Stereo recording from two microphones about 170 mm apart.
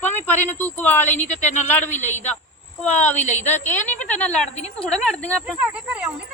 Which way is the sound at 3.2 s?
45° left (ahead or behind).